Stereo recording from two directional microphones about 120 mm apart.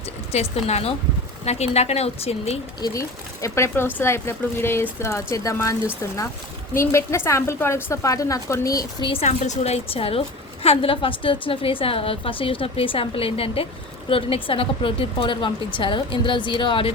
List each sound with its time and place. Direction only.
0.3 s a woman's voice: 60° left (ahead or behind)
2.8 s speech: 25° left (ahead or behind)
6.7 s speech: 25° left (ahead or behind)
9.2 s a woman's voice: 75° left (ahead or behind); by 16.9 s 45° left (ahead or behind)